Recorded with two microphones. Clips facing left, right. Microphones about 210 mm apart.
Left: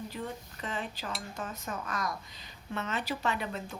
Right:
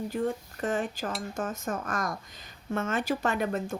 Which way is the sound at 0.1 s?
45° right (ahead or behind).